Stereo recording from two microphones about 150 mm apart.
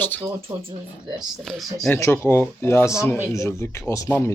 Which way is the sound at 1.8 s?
15° left (ahead or behind).